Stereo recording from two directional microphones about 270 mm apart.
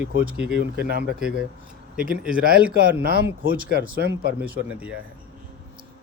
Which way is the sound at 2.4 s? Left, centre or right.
Right.